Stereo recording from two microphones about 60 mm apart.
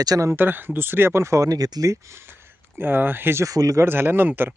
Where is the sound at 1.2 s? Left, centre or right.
Right.